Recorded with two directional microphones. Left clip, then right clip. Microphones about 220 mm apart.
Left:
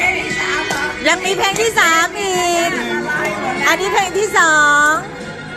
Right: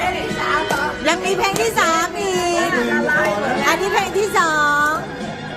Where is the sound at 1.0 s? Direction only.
15° left (ahead or behind).